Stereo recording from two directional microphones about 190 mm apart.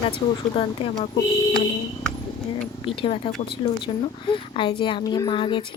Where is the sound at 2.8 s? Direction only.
30° left (ahead or behind).